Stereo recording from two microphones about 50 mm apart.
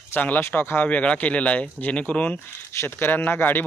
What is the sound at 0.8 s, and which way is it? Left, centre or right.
Speech, left.